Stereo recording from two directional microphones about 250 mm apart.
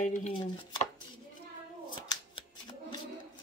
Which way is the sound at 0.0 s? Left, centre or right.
Left.